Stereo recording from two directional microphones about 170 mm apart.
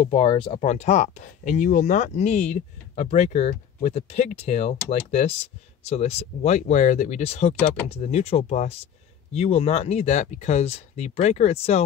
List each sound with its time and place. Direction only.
0.0 s speech: 35° left (ahead or behind)